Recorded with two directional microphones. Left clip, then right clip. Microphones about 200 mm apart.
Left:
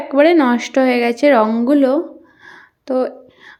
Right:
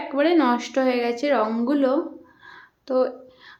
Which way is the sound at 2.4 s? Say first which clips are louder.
Left 7 dB; 25° left (ahead or behind).